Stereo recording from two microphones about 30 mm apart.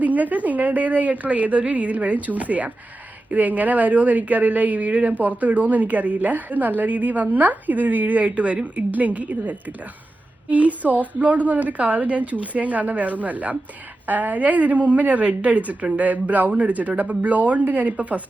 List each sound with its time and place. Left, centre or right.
0.0 s a woman's voice: right